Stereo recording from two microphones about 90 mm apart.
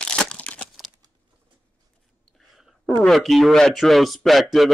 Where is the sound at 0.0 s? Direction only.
10° left (ahead or behind).